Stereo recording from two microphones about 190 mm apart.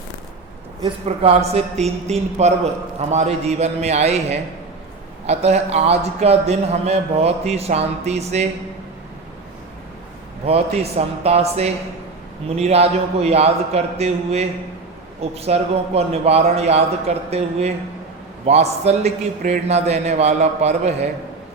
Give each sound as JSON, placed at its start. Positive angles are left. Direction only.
{"t": 1.0, "sound": "a man's voice", "side_deg": -35}
{"t": 10.4, "sound": "a man's voice", "side_deg": -30}